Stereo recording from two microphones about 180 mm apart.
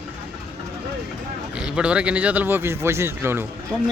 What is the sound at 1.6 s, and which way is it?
Speech, 5° right (ahead or behind).